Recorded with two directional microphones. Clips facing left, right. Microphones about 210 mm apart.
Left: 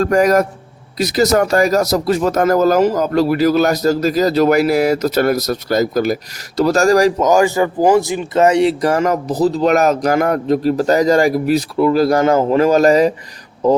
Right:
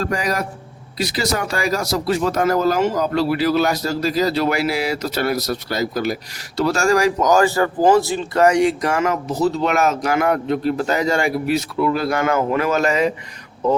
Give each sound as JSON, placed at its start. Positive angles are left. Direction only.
{"t": 0.0, "sound": "speech", "side_deg": 45}
{"t": 7.3, "sound": "speech", "side_deg": 15}